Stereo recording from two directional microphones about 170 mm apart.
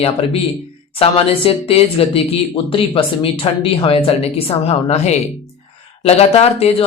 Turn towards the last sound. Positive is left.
turn(degrees=35)  # may be behind; listen again after turning